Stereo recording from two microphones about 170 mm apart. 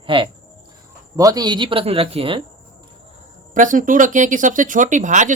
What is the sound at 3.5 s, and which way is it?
Speech, 50° right (ahead or behind).